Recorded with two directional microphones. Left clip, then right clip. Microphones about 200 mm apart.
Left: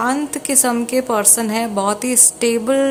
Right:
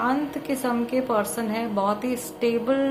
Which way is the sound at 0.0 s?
30° left (ahead or behind).